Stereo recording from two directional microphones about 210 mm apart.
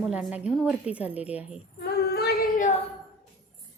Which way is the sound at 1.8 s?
50° left (ahead or behind).